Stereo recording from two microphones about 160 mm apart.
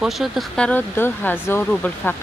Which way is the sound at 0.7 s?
15° left (ahead or behind).